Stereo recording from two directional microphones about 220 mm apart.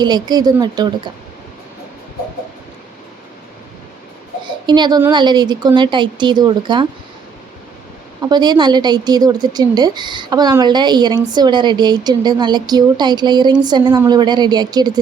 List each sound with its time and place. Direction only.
0.0 s a woman's voice: 20° right (ahead or behind)
4.6 s a woman's voice: 20° right (ahead or behind)
8.2 s a woman's voice: 20° right (ahead or behind)